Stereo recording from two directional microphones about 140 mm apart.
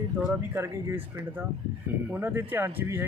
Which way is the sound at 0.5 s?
15° right (ahead or behind).